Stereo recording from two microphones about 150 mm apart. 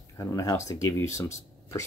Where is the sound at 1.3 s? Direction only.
20° left (ahead or behind).